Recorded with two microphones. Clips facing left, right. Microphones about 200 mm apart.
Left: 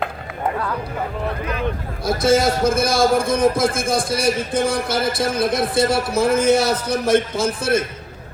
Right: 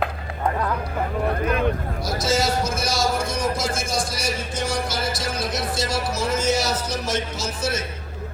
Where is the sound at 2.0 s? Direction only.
55° left (ahead or behind).